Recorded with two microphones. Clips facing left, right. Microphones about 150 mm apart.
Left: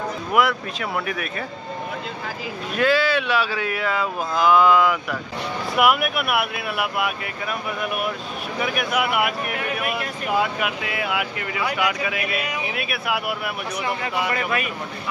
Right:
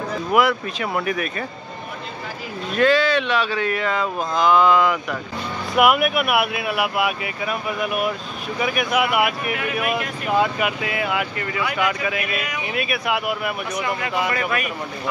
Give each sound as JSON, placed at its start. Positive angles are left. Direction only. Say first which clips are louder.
{"t": 0.3, "sound": "speech", "louder": "right 2 dB", "side_deg": 0}
{"t": 2.7, "sound": "speech", "louder": "right 2 dB", "side_deg": 10}
{"t": 14.3, "sound": "speech", "louder": "right 1 dB", "side_deg": 25}